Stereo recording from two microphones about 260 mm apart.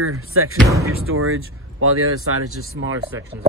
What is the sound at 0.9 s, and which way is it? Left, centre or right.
Speech, right.